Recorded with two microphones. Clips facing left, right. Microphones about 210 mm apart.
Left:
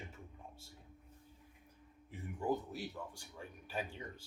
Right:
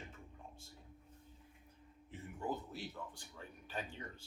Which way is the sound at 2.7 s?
10° left (ahead or behind).